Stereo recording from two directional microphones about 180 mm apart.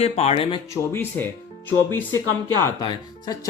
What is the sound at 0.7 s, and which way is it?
Speech, 15° left (ahead or behind).